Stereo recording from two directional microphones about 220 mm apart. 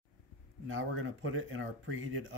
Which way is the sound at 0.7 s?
60° right (ahead or behind).